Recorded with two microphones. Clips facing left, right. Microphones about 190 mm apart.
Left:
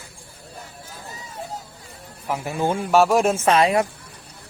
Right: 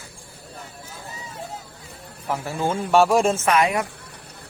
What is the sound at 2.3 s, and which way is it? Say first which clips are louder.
Speech: left 1 dB; 15° left (ahead or behind).